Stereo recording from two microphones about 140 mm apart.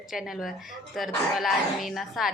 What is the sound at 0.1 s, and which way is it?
A woman's voice, 5° right (ahead or behind).